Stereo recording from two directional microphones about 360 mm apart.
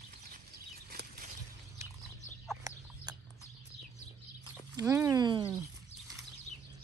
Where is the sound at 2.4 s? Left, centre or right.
Centre.